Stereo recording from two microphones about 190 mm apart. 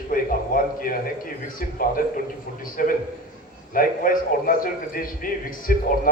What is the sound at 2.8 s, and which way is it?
A man's voice, 45° left (ahead or behind).